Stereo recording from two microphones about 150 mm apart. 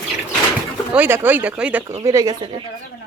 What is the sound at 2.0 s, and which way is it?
Speech, 25° right (ahead or behind).